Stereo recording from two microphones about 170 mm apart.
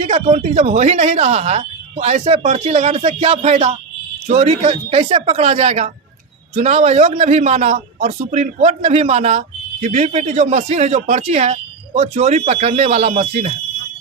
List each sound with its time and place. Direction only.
0.0 s speech: 40° right (ahead or behind)